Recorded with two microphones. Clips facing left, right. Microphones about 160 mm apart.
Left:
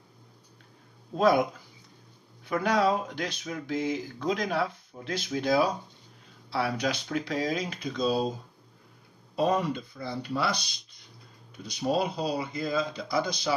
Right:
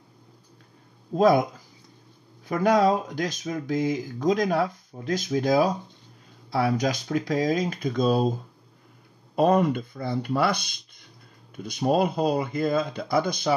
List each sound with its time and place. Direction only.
2.4 s speech: 45° right (ahead or behind)